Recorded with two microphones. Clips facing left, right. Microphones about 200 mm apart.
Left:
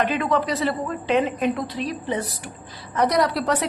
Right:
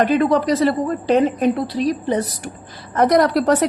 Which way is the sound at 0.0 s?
35° right (ahead or behind).